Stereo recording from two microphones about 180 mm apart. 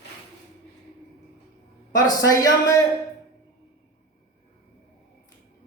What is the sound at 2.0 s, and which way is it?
Speech, 20° left (ahead or behind).